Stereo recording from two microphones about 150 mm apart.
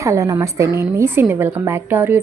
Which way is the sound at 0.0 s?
20° right (ahead or behind).